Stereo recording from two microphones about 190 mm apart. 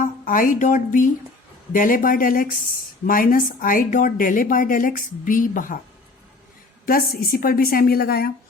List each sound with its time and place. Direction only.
0.0 s a woman's voice: 45° left (ahead or behind)
6.8 s speech: 50° left (ahead or behind)